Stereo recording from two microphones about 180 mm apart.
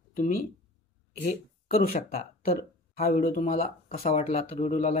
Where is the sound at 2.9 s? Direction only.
45° left (ahead or behind).